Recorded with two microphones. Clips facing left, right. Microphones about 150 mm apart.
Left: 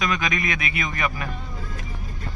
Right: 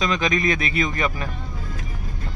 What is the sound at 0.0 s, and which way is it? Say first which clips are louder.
Speech: right 4 dB; 30° right (ahead or behind).